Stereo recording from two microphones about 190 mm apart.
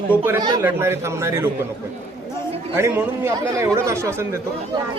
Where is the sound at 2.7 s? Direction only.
15° right (ahead or behind).